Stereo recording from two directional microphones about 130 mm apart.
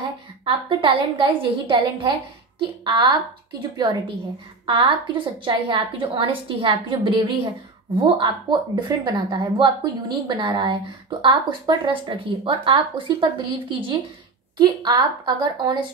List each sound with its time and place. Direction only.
0.0 s a woman's voice: 40° right (ahead or behind)